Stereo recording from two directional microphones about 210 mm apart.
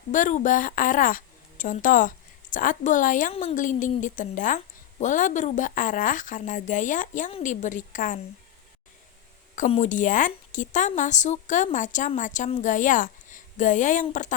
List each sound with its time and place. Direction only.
0.1 s a woman's voice: 35° left (ahead or behind)
9.6 s a woman's voice: 30° left (ahead or behind)